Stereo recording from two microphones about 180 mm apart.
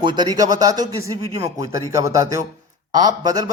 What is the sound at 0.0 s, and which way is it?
Speech, 20° right (ahead or behind).